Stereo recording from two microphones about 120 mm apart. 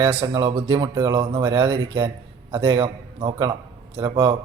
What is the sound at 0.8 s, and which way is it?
A man's voice, 35° right (ahead or behind).